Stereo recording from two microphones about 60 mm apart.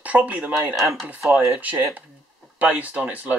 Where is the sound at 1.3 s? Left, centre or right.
Right.